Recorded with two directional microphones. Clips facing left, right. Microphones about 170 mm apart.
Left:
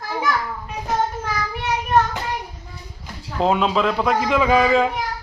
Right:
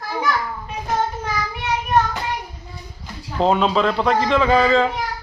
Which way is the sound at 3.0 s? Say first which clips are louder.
Right 1 dB; 5° left (ahead or behind).